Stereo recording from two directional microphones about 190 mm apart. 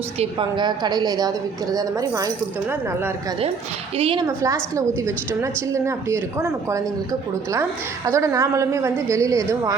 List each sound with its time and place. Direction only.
0.2 s a woman's voice: 25° right (ahead or behind)
3.9 s a woman's voice: 30° right (ahead or behind)